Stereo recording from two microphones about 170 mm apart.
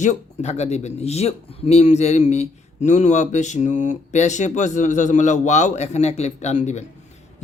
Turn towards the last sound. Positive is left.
turn(degrees=45)  # may be behind; listen again after turning